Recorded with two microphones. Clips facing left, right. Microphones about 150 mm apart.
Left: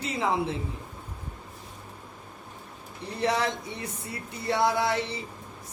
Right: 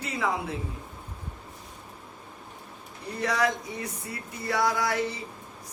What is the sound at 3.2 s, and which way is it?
Speech, 30° left (ahead or behind).